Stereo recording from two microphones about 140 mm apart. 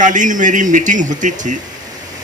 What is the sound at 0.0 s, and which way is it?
A man's voice, 65° right (ahead or behind).